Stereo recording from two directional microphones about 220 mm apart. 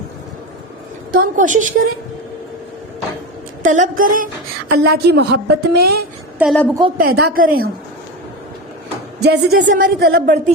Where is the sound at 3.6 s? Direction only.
35° right (ahead or behind).